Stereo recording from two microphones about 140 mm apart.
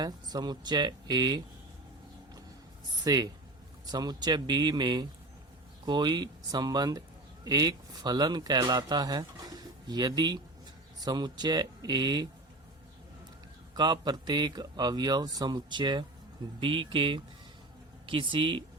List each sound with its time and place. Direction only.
0.0 s speech: 30° right (ahead or behind)
3.0 s speech: 30° right (ahead or behind)
13.7 s speech: 30° right (ahead or behind)